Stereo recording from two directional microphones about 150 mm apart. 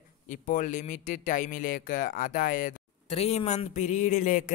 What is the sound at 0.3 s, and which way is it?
Speech, 60° left (ahead or behind).